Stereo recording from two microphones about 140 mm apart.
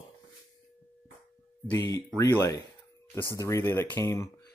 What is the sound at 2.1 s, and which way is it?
Speech, 20° left (ahead or behind).